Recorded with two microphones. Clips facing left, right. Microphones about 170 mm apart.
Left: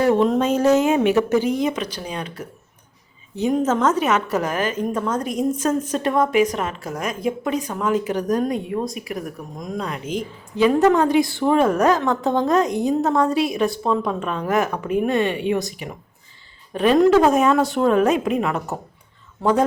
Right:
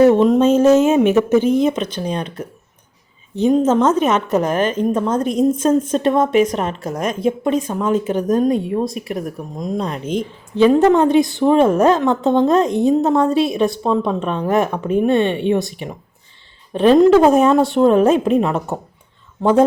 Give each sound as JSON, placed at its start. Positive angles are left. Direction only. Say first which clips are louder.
{"t": 0.0, "sound": "a woman's voice", "louder": "right 6 dB", "side_deg": -20}
{"t": 2.0, "sound": "speech", "louder": "right 6 dB", "side_deg": -35}
{"t": 3.3, "sound": "a woman's voice", "louder": "right 6 dB", "side_deg": -25}